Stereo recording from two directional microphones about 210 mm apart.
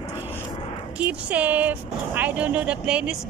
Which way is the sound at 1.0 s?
5° right (ahead or behind).